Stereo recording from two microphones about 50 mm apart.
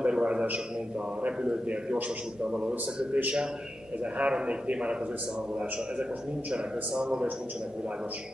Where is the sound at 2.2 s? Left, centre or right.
Centre.